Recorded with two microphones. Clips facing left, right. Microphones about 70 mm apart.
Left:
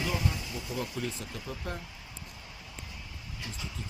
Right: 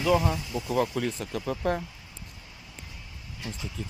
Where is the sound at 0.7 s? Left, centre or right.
Right.